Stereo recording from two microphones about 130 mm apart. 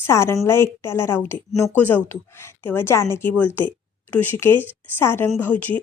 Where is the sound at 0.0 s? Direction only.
20° left (ahead or behind).